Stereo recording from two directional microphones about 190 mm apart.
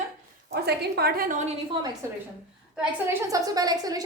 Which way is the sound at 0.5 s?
55° right (ahead or behind).